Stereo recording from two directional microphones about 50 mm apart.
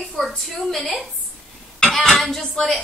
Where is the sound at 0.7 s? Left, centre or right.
Centre.